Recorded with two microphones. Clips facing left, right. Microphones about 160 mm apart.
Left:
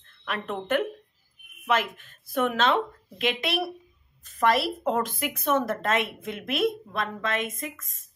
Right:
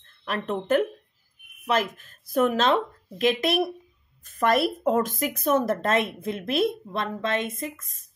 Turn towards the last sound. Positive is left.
turn(degrees=-35)  # may be behind; listen again after turning